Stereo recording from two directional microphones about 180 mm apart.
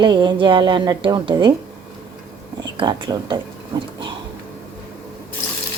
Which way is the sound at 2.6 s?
25° right (ahead or behind).